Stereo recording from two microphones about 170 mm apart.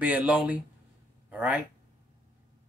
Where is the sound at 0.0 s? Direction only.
10° right (ahead or behind).